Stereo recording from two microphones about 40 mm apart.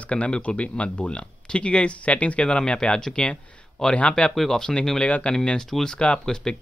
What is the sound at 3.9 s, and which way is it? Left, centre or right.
Speech, left.